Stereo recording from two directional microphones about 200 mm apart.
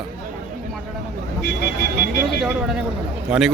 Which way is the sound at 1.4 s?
55° left (ahead or behind).